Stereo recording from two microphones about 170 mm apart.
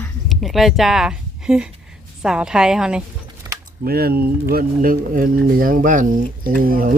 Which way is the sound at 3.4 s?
25° right (ahead or behind).